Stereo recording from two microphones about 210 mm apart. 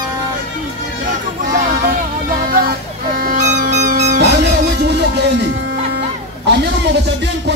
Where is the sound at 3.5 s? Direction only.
55° right (ahead or behind).